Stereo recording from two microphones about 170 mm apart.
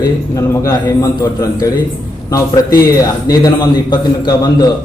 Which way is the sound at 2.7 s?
20° left (ahead or behind).